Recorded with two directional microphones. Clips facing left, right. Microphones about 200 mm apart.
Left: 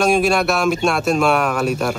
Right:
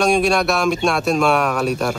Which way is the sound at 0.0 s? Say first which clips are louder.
Even; centre (ahead or behind).